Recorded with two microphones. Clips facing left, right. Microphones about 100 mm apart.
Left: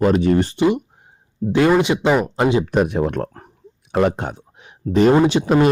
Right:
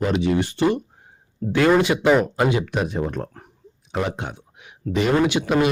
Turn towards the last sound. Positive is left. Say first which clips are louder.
# left 4 dB
turn(degrees=35)  # may be behind; listen again after turning